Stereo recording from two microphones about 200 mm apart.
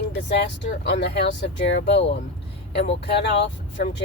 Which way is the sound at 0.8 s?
60° left (ahead or behind).